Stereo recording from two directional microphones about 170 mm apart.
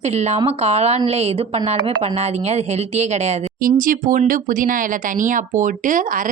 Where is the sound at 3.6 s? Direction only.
55° right (ahead or behind).